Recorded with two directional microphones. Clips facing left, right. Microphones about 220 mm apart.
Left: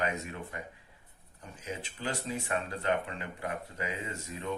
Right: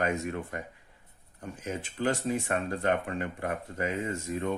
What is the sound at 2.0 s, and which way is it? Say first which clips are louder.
Speech: right 8 dB; 45° right (ahead or behind).